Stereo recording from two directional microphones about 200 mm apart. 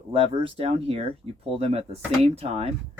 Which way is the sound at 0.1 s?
30° right (ahead or behind).